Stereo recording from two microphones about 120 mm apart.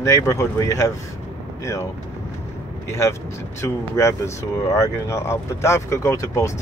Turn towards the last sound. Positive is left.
turn(degrees=25)  # may be behind; listen again after turning